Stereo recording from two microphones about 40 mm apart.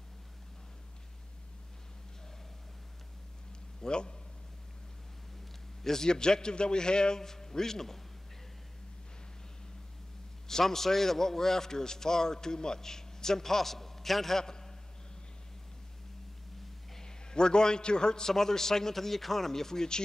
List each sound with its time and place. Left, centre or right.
3.8 s a man's voice: left
5.9 s a man's voice: centre
10.5 s a man's voice: centre
14.4 s a sound: centre
16.9 s a man's voice: centre